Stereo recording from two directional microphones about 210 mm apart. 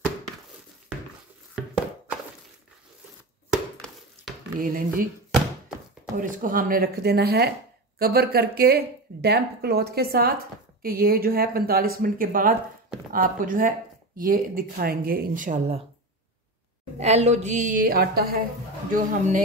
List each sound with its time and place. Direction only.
3.5 s a sound: centre (ahead or behind)
4.6 s speech: 40° right (ahead or behind)
6.1 s speech: 40° right (ahead or behind)
17.0 s speech: 30° right (ahead or behind)